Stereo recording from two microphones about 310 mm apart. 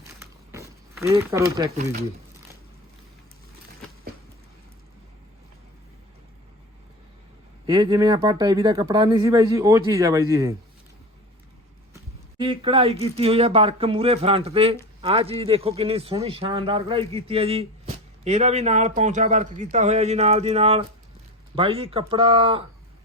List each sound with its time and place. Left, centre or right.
0.2 s a sound: centre
7.7 s speech: centre
12.4 s speech: centre